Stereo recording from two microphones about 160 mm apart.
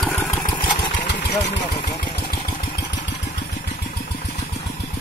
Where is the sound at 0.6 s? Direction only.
30° left (ahead or behind).